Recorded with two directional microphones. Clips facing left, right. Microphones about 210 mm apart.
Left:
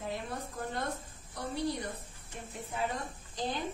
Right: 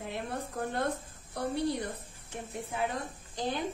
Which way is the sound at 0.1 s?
60° right (ahead or behind).